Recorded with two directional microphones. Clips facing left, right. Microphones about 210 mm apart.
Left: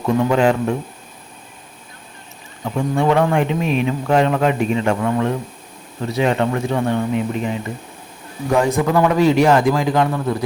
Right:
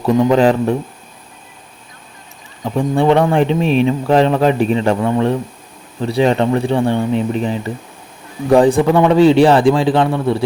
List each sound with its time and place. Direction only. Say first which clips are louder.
0.0 s speech: right 4 dB; 35° right (ahead or behind)
2.7 s speech: right 4 dB; 30° right (ahead or behind)